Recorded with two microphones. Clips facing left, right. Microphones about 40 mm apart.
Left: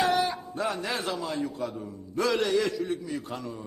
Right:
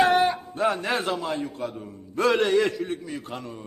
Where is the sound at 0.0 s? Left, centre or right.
Right.